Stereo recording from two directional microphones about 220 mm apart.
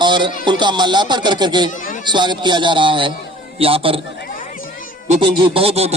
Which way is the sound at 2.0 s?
20° right (ahead or behind).